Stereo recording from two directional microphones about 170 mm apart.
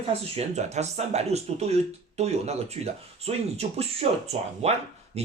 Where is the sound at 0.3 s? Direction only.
40° right (ahead or behind).